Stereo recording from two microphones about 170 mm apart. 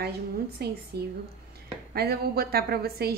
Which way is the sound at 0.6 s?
70° right (ahead or behind).